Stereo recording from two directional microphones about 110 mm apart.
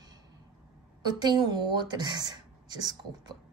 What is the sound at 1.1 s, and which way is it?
Speech, 40° right (ahead or behind).